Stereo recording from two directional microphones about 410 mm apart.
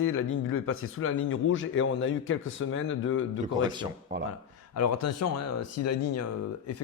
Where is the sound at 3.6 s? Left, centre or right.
Centre.